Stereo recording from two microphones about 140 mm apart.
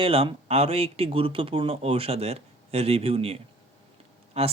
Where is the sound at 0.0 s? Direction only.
40° right (ahead or behind).